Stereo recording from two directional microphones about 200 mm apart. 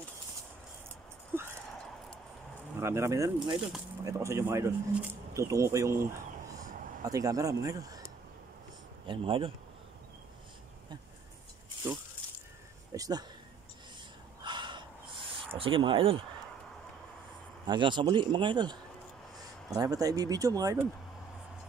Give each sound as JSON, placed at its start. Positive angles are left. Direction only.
{"t": 1.3, "sound": "a sound", "side_deg": -10}
{"t": 2.8, "sound": "speech", "side_deg": -15}
{"t": 9.0, "sound": "speech", "side_deg": -25}
{"t": 12.9, "sound": "speech", "side_deg": -15}
{"t": 14.4, "sound": "snort", "side_deg": -25}
{"t": 15.5, "sound": "speech", "side_deg": -25}
{"t": 17.6, "sound": "speech", "side_deg": -25}